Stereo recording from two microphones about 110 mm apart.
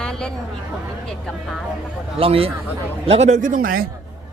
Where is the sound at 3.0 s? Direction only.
80° right.